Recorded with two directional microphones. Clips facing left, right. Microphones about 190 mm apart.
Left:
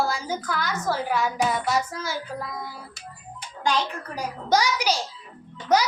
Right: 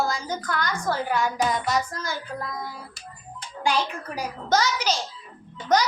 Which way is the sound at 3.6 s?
10° right (ahead or behind).